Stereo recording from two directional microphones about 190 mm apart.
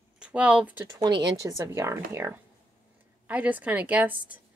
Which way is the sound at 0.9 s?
20° right (ahead or behind).